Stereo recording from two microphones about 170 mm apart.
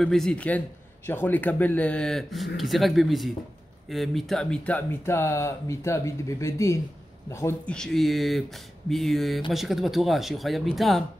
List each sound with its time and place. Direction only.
0.0 s speech: 5° left (ahead or behind)